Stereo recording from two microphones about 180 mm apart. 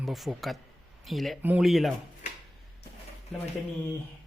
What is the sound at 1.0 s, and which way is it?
Speech, centre (ahead or behind).